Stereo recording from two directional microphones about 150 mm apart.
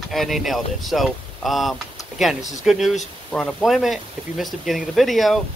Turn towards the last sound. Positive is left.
turn(degrees=0)  # may be behind; listen again after turning